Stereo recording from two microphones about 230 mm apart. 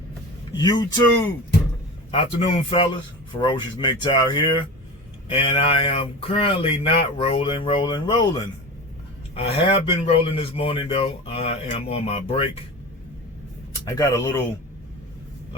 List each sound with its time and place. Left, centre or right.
0.5 s speech: centre
2.0 s speech: left
13.8 s speech: centre